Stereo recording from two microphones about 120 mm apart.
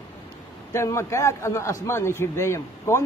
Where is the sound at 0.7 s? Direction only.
25° left (ahead or behind).